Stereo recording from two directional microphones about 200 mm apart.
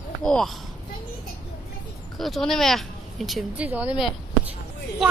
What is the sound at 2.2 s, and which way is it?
Speech, centre (ahead or behind).